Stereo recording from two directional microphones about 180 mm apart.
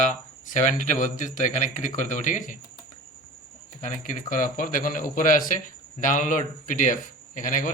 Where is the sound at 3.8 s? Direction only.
45° left (ahead or behind).